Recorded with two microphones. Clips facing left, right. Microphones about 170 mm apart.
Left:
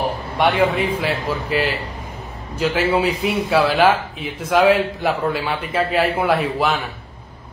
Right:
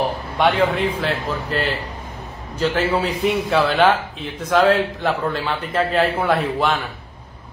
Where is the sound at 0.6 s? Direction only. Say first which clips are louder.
Left 1 dB; 10° left (ahead or behind).